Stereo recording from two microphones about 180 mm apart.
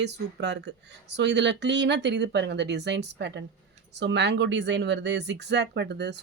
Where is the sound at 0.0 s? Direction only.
70° right (ahead or behind).